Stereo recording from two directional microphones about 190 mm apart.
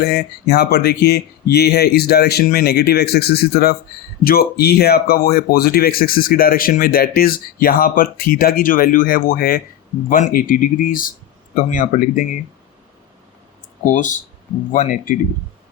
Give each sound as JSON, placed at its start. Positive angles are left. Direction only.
{"t": 0.0, "sound": "speech", "side_deg": 60}
{"t": 13.8, "sound": "speech", "side_deg": 40}